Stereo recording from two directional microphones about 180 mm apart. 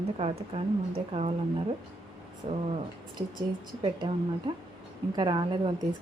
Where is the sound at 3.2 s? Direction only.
25° right (ahead or behind).